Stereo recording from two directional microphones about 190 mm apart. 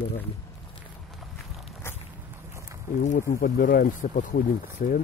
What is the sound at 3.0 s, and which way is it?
Speech, 45° left (ahead or behind).